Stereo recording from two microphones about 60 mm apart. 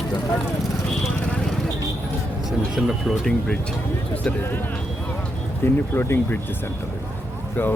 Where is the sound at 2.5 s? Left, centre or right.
Centre.